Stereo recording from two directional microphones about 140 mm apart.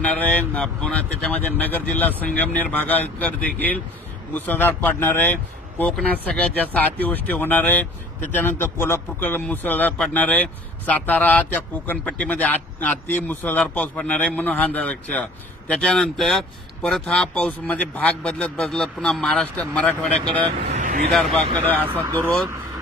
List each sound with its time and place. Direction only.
0.0 s speech: 10° left (ahead or behind)
20.7 s vehicle: 60° right (ahead or behind)
21.1 s speech: centre (ahead or behind)